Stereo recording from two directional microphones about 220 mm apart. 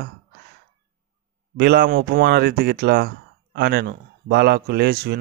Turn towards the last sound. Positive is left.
turn(degrees=-50)  # may be behind; listen again after turning